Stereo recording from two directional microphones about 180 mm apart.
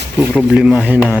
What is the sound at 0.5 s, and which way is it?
Speech, 5° right (ahead or behind).